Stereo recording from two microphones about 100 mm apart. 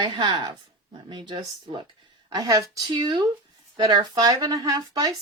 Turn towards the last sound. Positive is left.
turn(degrees=-40)  # may be behind; listen again after turning